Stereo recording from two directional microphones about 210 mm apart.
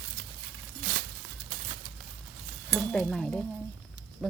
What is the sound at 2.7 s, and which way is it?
Stir, 5° left (ahead or behind).